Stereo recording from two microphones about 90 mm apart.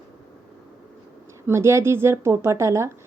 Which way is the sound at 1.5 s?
30° right (ahead or behind).